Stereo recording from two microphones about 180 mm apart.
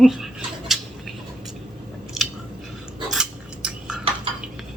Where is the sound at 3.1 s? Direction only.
5° right (ahead or behind).